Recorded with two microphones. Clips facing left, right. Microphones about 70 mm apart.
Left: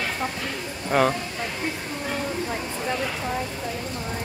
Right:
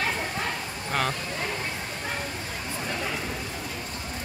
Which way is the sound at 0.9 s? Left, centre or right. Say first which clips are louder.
Left 7 dB; centre.